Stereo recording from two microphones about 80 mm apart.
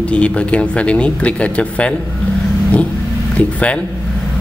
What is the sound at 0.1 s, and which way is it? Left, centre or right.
A man's voice, centre.